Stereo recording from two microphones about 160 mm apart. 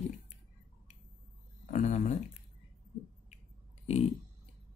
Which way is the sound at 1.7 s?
45° left (ahead or behind).